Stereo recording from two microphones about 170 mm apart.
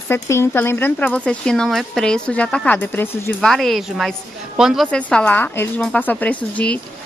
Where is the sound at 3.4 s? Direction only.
Centre (ahead or behind).